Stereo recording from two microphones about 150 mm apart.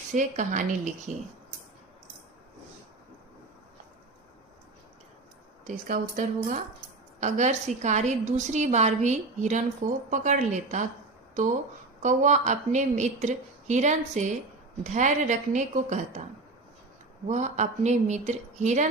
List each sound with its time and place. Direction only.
0.1 s a woman's voice: 55° right (ahead or behind)
5.6 s a woman's voice: 55° right (ahead or behind)
17.2 s a woman's voice: 50° right (ahead or behind)